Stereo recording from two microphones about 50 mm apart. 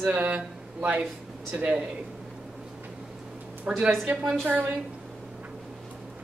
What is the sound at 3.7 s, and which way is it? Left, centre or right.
Speech, centre.